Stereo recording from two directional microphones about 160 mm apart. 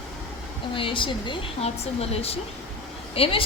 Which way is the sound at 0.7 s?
30° left (ahead or behind).